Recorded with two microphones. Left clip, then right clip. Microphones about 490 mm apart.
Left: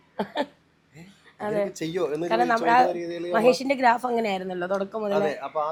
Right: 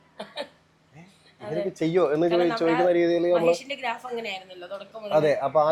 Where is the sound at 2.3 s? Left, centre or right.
Left.